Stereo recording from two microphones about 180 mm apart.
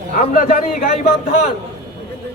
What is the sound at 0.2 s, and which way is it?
Speech, 55° left (ahead or behind).